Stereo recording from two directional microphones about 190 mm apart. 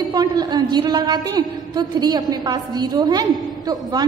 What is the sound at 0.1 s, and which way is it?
A woman's voice, 20° right (ahead or behind).